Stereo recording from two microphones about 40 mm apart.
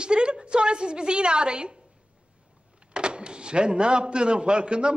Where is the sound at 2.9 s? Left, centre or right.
Right.